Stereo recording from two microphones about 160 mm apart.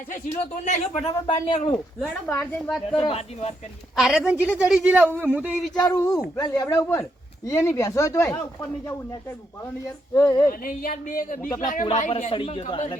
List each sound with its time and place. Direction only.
0.6 s speech: 45° left (ahead or behind)
2.2 s speech: 15° left (ahead or behind)
2.9 s speech: 35° left (ahead or behind)
3.9 s a man's voice: 5° right (ahead or behind)
5.9 s speech: 15° left (ahead or behind)
9.8 s speech: 20° left (ahead or behind)
10.6 s speech: 60° left (ahead or behind)
12.3 s speech: 35° left (ahead or behind)